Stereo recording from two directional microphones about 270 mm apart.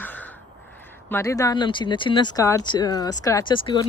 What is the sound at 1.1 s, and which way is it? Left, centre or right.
Speech, centre.